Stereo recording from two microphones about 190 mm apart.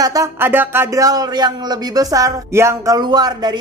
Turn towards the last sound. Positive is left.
turn(degrees=-20)  # may be behind; listen again after turning